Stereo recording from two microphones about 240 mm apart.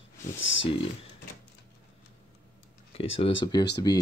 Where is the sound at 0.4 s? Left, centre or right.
Left.